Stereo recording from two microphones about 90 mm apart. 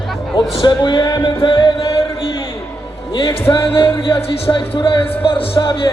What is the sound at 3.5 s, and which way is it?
Speech, 80° left.